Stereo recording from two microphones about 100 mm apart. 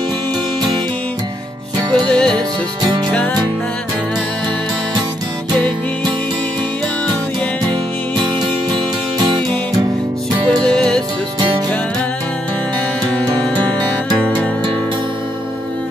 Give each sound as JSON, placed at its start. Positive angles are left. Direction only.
{"t": 2.0, "sound": "music", "side_deg": 5}
{"t": 8.7, "sound": "music", "side_deg": -50}
{"t": 10.6, "sound": "music", "side_deg": 10}
{"t": 13.1, "sound": "music", "side_deg": 10}